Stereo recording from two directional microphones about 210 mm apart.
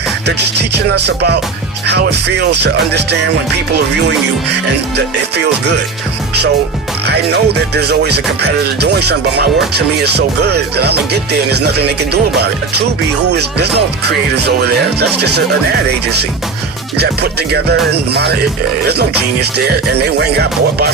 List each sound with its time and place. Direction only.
0.9 s music: 50° right (ahead or behind)
7.1 s music: 50° right (ahead or behind)
10.2 s music: 50° right (ahead or behind)
17.0 s music: 50° right (ahead or behind)